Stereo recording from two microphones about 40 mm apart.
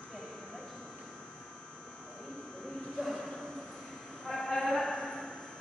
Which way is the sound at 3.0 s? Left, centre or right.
Centre.